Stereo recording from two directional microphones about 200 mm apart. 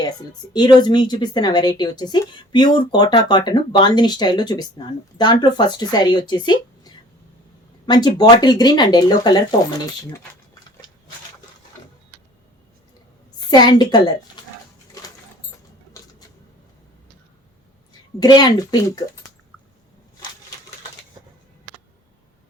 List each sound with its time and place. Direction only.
0.0 s speech: 20° left (ahead or behind)
13.5 s speech: 20° left (ahead or behind)
18.2 s speech: 20° left (ahead or behind)